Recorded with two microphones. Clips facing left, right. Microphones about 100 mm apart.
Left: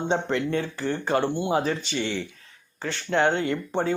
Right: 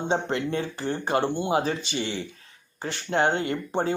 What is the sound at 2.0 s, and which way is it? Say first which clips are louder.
Speech: left 2 dB; 60° left (ahead or behind).